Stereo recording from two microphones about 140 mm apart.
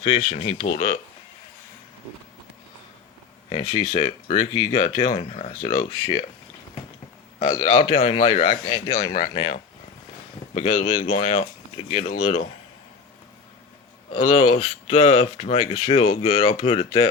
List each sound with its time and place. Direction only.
0.0 s speech: 40° left (ahead or behind)
3.5 s speech: 45° left (ahead or behind)
7.3 s a man's voice: 30° left (ahead or behind)
10.5 s speech: 50° left (ahead or behind)
14.1 s speech: 40° left (ahead or behind)